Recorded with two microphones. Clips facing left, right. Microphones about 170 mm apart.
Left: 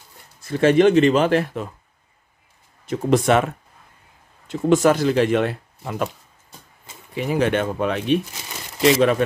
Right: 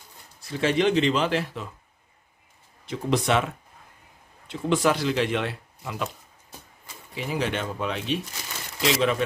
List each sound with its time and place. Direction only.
0.4 s speech: 50° left (ahead or behind)
2.9 s speech: 50° left (ahead or behind)
7.2 s speech: 55° left (ahead or behind)